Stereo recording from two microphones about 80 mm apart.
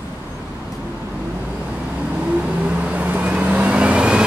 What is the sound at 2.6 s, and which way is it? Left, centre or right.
Vehicle, centre.